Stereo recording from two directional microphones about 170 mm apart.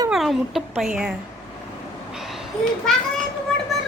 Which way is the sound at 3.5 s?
5° left (ahead or behind).